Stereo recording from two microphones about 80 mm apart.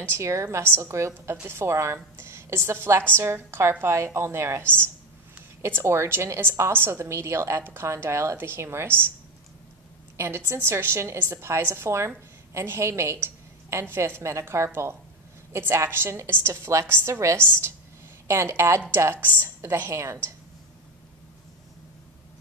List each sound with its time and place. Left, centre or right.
0.1 s a woman's voice: right
10.1 s a woman's voice: right